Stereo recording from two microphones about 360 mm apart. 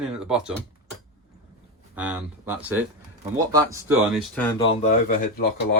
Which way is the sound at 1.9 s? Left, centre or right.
Centre.